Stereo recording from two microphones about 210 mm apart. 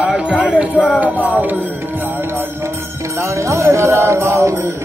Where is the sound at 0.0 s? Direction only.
5° right (ahead or behind).